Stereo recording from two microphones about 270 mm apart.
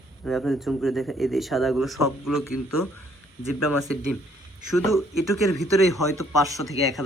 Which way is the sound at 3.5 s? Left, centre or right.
Left.